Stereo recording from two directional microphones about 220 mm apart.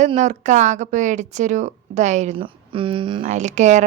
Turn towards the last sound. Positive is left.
turn(degrees=-35)  # may be behind; listen again after turning